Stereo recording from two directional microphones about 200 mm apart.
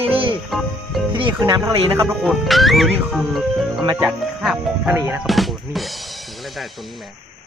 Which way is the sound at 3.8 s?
20° right (ahead or behind).